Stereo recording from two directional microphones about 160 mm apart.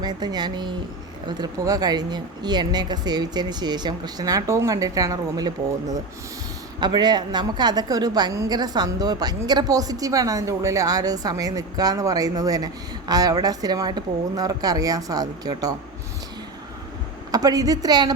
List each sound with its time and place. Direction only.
0.0 s a woman's voice: 25° right (ahead or behind)
17.3 s a woman's voice: 25° right (ahead or behind)